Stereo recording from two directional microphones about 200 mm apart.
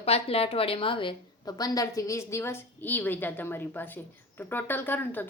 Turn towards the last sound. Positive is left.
turn(degrees=10)  # may be behind; listen again after turning